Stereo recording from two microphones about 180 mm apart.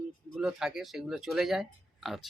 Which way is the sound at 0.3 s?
5° right (ahead or behind).